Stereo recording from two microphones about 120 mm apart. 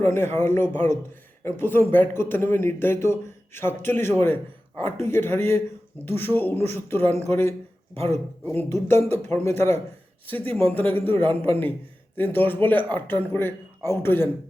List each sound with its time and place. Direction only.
0.0 s speech: 20° left (ahead or behind)